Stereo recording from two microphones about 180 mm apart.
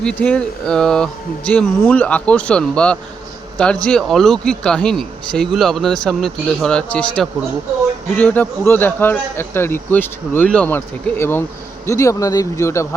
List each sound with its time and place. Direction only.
0.0 s a man's voice: 5° left (ahead or behind)